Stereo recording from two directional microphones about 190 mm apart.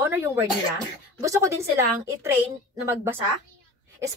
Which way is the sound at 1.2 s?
15° right (ahead or behind).